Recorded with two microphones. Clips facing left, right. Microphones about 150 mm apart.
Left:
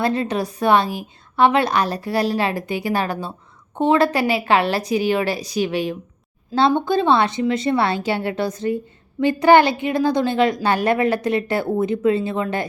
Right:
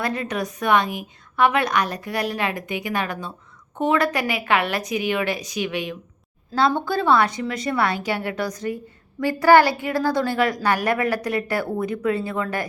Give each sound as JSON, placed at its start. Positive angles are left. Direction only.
{"t": 0.0, "sound": "a woman's voice", "side_deg": 30}